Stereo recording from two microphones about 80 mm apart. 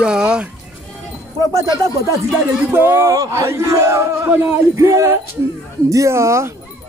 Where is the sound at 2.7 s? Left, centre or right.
Right.